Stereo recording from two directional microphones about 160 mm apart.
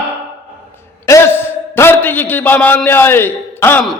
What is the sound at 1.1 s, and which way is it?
A man's voice, 15° left (ahead or behind).